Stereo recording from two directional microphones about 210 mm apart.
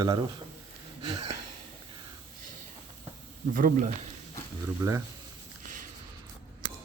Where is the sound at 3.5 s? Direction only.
40° right (ahead or behind).